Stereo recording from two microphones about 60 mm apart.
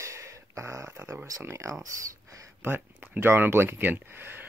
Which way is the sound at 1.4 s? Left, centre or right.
Right.